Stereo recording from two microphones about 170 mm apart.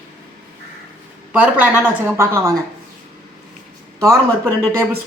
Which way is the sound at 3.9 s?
20° right (ahead or behind).